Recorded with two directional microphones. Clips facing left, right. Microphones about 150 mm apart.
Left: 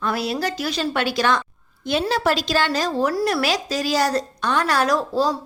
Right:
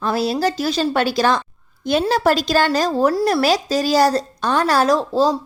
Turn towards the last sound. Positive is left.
turn(degrees=-25)  # may be behind; listen again after turning